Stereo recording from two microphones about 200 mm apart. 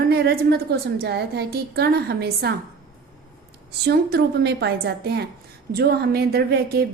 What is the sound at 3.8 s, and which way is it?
A woman's voice, 55° right (ahead or behind).